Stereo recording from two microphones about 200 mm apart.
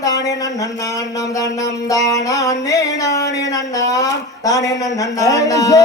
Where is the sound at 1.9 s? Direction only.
15° left (ahead or behind).